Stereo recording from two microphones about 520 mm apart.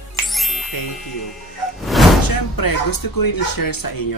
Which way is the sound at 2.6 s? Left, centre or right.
Left.